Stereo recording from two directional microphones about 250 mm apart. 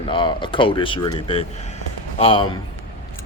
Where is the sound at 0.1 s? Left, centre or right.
Centre.